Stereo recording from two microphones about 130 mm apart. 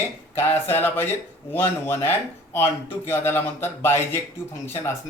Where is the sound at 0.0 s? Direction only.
15° left (ahead or behind).